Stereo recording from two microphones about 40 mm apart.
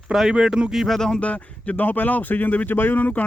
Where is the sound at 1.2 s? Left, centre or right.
Left.